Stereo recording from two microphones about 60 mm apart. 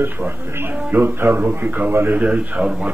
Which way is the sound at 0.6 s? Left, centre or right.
Right.